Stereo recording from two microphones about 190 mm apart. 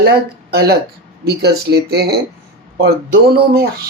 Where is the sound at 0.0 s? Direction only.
55° right (ahead or behind).